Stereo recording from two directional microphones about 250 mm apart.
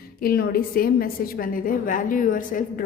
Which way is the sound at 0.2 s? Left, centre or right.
Left.